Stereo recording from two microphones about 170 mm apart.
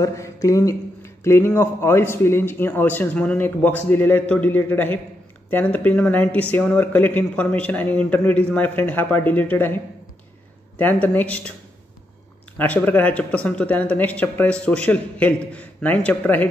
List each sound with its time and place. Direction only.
0.0 s speech: 20° left (ahead or behind)
10.8 s speech: 10° left (ahead or behind)
12.5 s speech: 10° left (ahead or behind)